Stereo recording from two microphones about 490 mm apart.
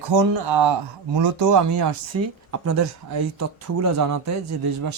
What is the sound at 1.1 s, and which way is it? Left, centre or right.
Speech, right.